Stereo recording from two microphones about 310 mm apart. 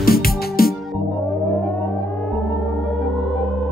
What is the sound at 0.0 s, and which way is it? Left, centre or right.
Music, left.